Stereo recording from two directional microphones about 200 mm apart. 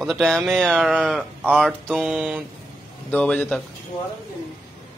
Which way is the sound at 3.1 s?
10° left (ahead or behind).